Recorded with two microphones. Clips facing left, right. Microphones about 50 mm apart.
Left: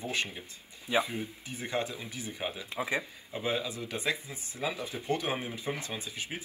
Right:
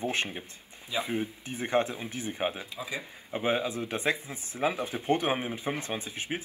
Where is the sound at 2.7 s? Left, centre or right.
Left.